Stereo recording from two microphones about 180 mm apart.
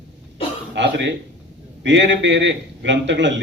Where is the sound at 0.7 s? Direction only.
75° right (ahead or behind).